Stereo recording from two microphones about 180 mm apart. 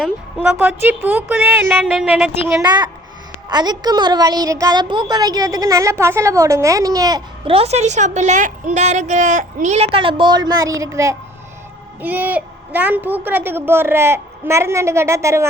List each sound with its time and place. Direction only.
0.0 s a woman's voice: 10° right (ahead or behind)
2.6 s a woman's voice: 25° right (ahead or behind)